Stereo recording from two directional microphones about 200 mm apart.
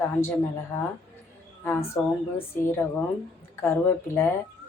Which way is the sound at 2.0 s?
10° left (ahead or behind).